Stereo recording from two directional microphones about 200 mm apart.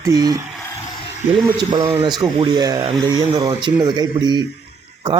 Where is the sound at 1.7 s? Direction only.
20° right (ahead or behind).